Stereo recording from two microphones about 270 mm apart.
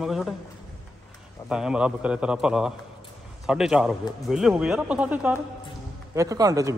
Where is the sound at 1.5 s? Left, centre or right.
Centre.